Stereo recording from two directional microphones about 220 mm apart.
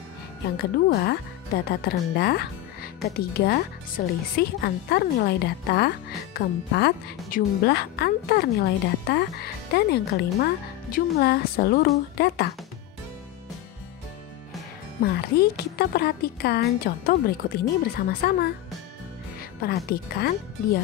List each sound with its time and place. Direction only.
0.6 s speech: 45° left (ahead or behind)
15.0 s speech: 45° left (ahead or behind)
19.6 s speech: 45° left (ahead or behind)